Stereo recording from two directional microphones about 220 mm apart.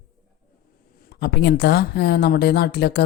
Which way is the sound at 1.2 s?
50° left (ahead or behind).